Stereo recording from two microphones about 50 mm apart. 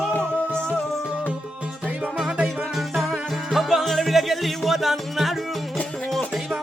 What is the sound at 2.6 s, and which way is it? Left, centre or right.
Music, centre.